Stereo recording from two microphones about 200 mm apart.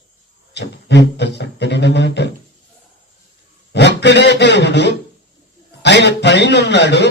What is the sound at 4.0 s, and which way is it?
A man's voice, 60° left (ahead or behind).